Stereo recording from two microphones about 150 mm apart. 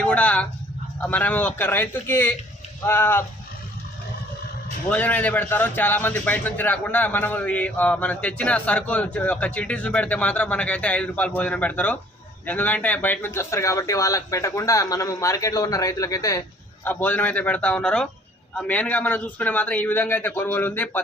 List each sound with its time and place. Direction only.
0.0 s a sound: 10° left (ahead or behind)
1.0 s a man's voice: 10° left (ahead or behind)
4.9 s a man's voice: 10° left (ahead or behind)
16.8 s a man's voice: 10° left (ahead or behind)